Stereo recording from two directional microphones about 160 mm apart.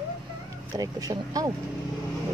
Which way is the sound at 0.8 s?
25° right (ahead or behind).